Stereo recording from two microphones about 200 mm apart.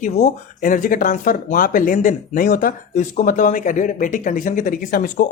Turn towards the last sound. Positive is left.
turn(degrees=45)  # may be behind; listen again after turning